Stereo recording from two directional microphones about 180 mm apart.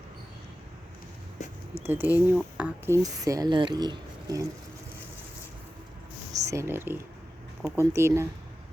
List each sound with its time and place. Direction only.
1.8 s speech: 10° right (ahead or behind)
6.3 s speech: 15° right (ahead or behind)